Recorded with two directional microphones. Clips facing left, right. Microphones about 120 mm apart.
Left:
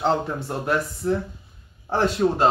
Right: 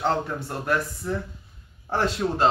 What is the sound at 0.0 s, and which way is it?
Speech, 20° left (ahead or behind).